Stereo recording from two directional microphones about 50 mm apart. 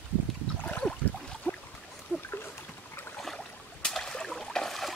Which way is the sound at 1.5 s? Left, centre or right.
Left.